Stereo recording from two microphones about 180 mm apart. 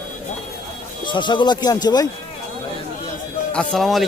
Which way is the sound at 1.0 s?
25° left (ahead or behind).